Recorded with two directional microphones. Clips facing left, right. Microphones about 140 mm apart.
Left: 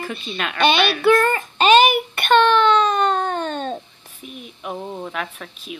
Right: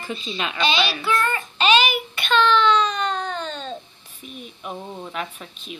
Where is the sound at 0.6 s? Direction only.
55° left (ahead or behind).